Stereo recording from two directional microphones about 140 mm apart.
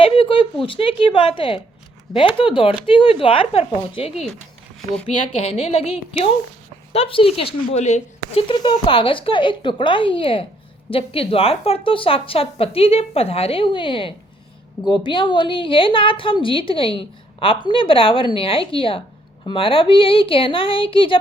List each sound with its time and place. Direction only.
0.0 s a woman's voice: 40° left (ahead or behind)
5.4 s a woman's voice: 45° left (ahead or behind)
7.7 s speech: 55° left (ahead or behind)
8.4 s a woman's voice: 35° left (ahead or behind)